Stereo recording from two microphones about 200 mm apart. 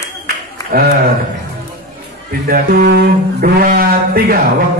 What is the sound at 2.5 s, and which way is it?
Speech, 50° right (ahead or behind).